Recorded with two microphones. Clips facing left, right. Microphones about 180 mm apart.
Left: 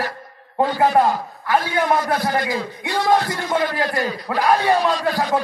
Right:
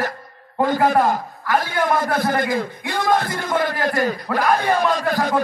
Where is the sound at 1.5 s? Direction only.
50° right (ahead or behind).